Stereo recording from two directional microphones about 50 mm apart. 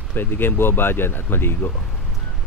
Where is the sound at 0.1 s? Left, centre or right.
Left.